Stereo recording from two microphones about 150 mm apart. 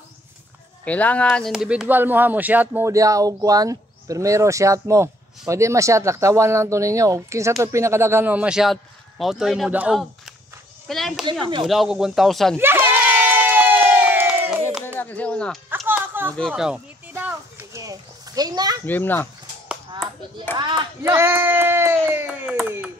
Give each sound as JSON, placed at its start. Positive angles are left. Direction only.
{"t": 0.8, "sound": "speech", "side_deg": 10}
{"t": 1.5, "sound": "speech", "side_deg": -5}
{"t": 12.5, "sound": "crowd", "side_deg": -15}
{"t": 15.0, "sound": "speech", "side_deg": 10}
{"t": 15.9, "sound": "a sound", "side_deg": -15}
{"t": 16.3, "sound": "speech", "side_deg": 0}
{"t": 17.1, "sound": "a sound", "side_deg": -10}
{"t": 18.9, "sound": "speech", "side_deg": 10}
{"t": 20.5, "sound": "speech", "side_deg": -30}
{"t": 21.0, "sound": "a sound", "side_deg": -15}